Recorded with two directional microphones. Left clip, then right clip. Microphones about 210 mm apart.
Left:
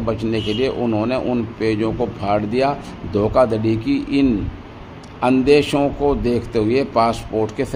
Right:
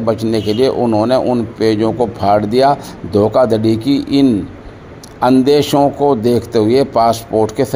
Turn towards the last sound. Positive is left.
turn(degrees=-20)  # may be behind; listen again after turning